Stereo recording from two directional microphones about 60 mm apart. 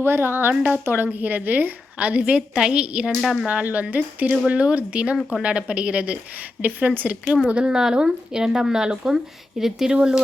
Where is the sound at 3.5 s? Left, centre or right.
Right.